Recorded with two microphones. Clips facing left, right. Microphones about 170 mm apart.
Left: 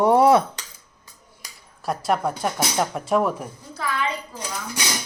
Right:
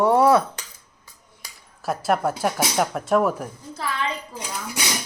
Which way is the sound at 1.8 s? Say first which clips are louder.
Right 1 dB; centre (ahead or behind).